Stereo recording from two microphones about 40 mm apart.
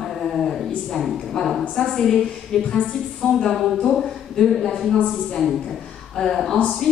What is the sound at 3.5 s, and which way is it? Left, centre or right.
A woman's voice, centre.